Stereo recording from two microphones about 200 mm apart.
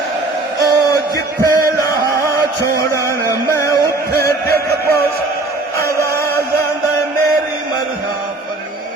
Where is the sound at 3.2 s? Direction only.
15° left (ahead or behind).